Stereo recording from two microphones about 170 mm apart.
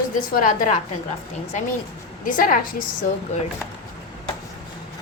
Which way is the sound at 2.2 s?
55° left (ahead or behind).